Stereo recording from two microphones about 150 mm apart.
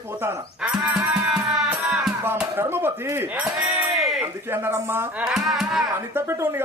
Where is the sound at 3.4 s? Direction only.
5° right (ahead or behind).